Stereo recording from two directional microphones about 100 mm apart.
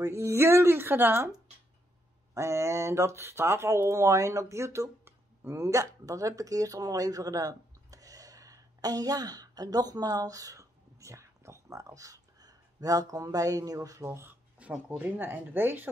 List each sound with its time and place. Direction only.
0.0 s speech: 30° right (ahead or behind)
2.3 s speech: 30° right (ahead or behind)
14.6 s speech: 15° right (ahead or behind)